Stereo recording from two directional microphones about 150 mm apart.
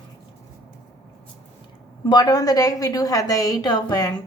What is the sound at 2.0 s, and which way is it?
A woman's voice, 25° left (ahead or behind).